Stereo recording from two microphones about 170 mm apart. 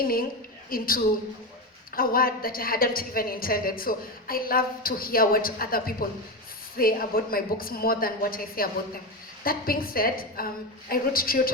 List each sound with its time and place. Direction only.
0.0 s a woman's voice: 60° left (ahead or behind)